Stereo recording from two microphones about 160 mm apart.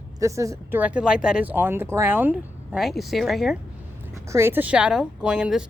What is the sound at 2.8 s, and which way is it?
Speech, centre (ahead or behind).